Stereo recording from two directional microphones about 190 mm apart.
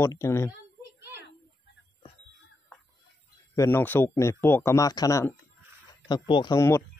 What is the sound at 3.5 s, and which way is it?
Speech, 15° left (ahead or behind).